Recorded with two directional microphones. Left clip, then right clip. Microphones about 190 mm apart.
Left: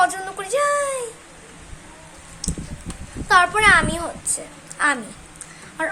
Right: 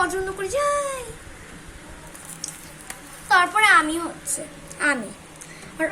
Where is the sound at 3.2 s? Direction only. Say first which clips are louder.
Left 2 dB; 20° left (ahead or behind).